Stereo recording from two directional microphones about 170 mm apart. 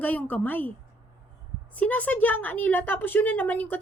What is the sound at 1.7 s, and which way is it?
A woman's voice, 10° left (ahead or behind).